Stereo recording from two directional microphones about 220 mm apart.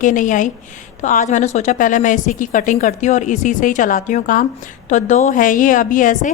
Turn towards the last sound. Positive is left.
turn(degrees=35)  # may be behind; listen again after turning